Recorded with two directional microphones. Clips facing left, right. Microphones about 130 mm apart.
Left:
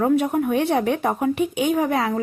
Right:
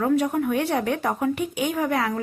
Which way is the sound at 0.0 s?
20° left (ahead or behind).